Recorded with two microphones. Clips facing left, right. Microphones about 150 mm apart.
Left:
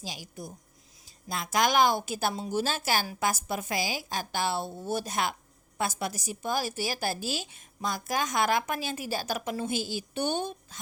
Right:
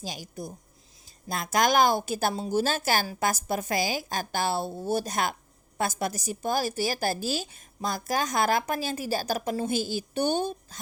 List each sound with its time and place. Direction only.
0.0 s a woman's voice: 45° right (ahead or behind)